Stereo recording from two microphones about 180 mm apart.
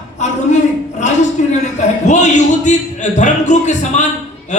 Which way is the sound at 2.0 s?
40° left (ahead or behind).